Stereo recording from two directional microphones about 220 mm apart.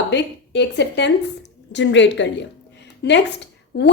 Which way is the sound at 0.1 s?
50° left (ahead or behind).